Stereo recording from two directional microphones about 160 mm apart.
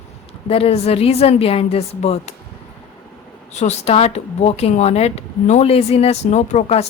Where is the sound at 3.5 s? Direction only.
45° left (ahead or behind).